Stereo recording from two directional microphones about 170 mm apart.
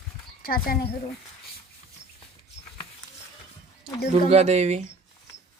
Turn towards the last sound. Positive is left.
turn(degrees=-40)  # may be behind; listen again after turning